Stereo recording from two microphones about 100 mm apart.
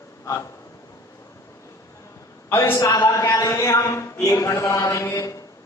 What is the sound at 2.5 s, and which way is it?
Speech, 25° left (ahead or behind).